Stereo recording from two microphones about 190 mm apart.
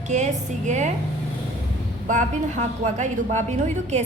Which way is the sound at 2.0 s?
40° right (ahead or behind).